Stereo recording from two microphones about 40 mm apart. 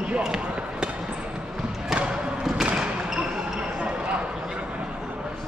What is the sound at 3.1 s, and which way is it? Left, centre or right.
Basketball bounce, centre.